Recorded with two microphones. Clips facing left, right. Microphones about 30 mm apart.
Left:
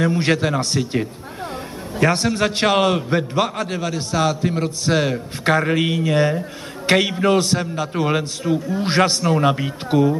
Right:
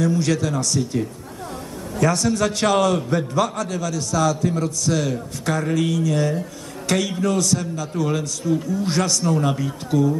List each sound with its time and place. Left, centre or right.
0.0 s a man's voice: left